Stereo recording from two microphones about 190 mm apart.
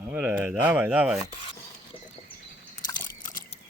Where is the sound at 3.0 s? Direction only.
45° left (ahead or behind).